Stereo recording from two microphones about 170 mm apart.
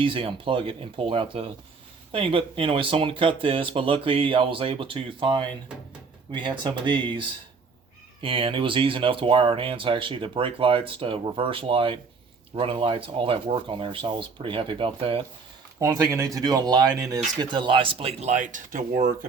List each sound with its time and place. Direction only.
0.0 s speech: 30° right (ahead or behind)
15.8 s speech: 20° right (ahead or behind); by 19.1 s 50° right (ahead or behind)